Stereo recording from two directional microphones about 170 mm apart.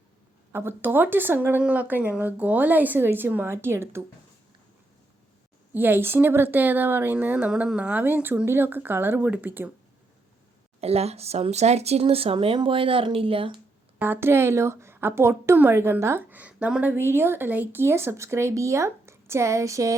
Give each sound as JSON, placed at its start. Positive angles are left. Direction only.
{"t": 0.5, "sound": "a woman's voice", "side_deg": -15}
{"t": 5.7, "sound": "a woman's voice", "side_deg": -10}
{"t": 10.8, "sound": "speech", "side_deg": -35}
{"t": 14.0, "sound": "a woman's voice", "side_deg": -15}